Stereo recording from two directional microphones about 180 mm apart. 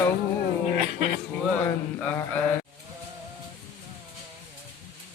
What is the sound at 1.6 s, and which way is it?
Mantra, 10° left (ahead or behind).